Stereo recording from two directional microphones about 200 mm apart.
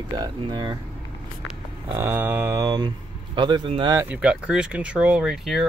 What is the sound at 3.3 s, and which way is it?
Speech, 20° right (ahead or behind).